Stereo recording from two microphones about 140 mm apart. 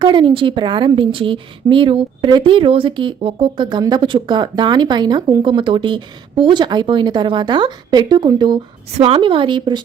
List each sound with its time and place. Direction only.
0.0 s a woman's voice: 35° right (ahead or behind)